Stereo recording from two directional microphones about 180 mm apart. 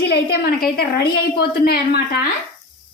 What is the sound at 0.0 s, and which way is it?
A woman's voice, 60° left (ahead or behind).